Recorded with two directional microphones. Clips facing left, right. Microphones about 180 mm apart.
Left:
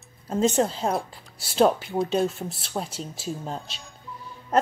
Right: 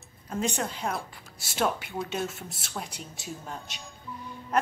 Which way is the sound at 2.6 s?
30° left (ahead or behind).